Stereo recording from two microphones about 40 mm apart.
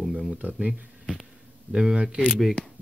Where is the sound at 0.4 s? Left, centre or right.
Right.